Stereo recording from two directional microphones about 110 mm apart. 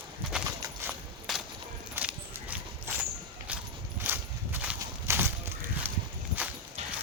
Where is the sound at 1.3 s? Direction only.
Centre (ahead or behind).